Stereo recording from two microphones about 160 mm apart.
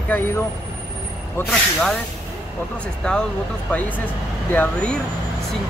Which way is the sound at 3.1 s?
5° left (ahead or behind).